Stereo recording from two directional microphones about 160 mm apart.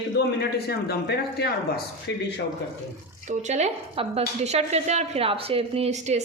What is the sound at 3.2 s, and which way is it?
Speech, 50° right (ahead or behind).